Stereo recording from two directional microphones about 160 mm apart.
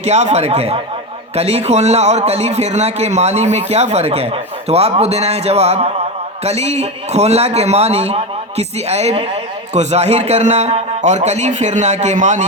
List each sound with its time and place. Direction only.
0.0 s a man's voice: 45° right (ahead or behind)